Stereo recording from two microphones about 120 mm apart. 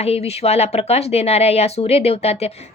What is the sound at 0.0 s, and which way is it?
Speech, 60° left (ahead or behind).